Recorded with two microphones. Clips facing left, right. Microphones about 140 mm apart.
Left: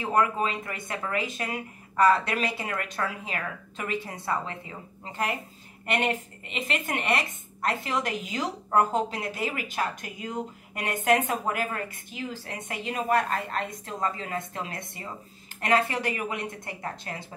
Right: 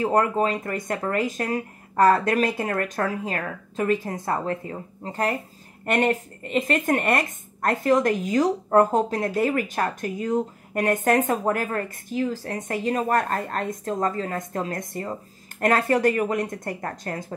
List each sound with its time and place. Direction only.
0.0 s a woman's voice: 40° right (ahead or behind)